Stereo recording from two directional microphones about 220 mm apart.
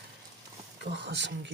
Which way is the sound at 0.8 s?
50° right (ahead or behind).